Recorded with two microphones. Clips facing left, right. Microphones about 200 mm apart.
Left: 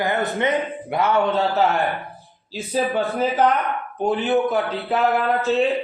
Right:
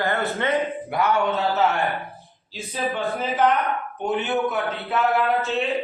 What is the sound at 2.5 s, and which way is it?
Speech, 40° left (ahead or behind).